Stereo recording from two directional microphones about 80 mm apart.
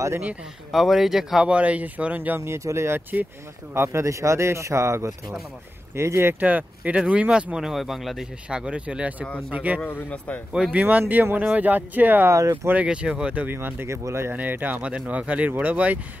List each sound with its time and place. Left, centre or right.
0.7 s a man's voice: centre; by 6.3 s right
6.4 s speech: centre
8.5 s speech: centre
9.8 s speech: left
10.5 s speech: centre
12.3 s speech: right
12.8 s a man's voice: centre; by 14.3 s right
14.3 s speech: right